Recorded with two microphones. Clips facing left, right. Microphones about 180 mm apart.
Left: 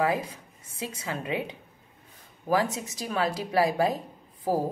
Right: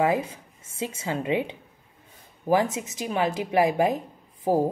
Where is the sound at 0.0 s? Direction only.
25° right (ahead or behind).